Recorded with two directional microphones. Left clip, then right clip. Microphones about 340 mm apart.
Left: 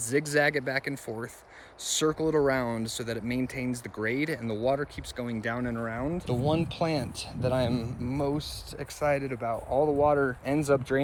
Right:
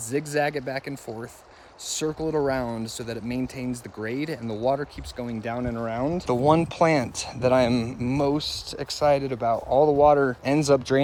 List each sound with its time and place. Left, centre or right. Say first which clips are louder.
0.1 s speech: even; centre; by 6.3 s right
6.3 s speech: right 9 dB; right
7.2 s speech: right 7 dB; right